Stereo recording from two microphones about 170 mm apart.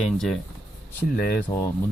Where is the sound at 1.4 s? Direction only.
20° left (ahead or behind).